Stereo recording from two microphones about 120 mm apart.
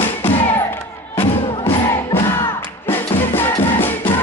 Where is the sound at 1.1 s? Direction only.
50° left (ahead or behind).